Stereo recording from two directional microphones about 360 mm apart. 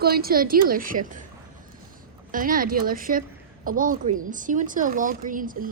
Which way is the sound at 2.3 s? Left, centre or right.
Right.